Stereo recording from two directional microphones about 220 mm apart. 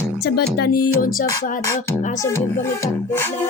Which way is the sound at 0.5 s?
45° left (ahead or behind).